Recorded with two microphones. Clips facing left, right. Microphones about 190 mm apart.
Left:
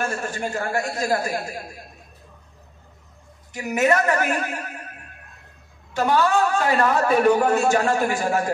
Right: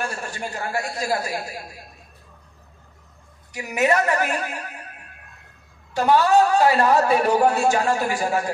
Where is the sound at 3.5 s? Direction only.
40° left (ahead or behind).